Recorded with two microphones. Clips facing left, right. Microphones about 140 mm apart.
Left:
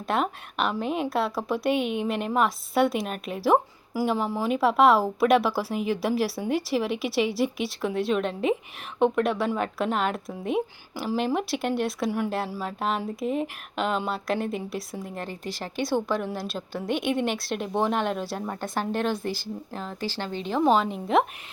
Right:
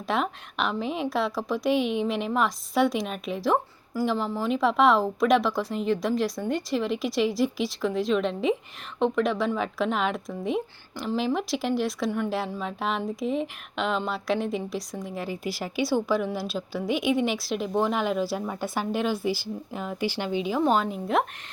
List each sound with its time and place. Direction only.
0.1 s speech: centre (ahead or behind)
20.6 s speech: centre (ahead or behind)